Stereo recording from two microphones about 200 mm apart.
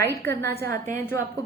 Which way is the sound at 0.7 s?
40° right (ahead or behind).